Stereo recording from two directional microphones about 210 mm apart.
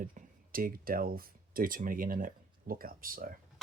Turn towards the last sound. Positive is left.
turn(degrees=-40)  # may be behind; listen again after turning